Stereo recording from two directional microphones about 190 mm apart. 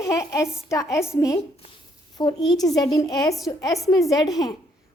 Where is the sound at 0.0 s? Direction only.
15° left (ahead or behind).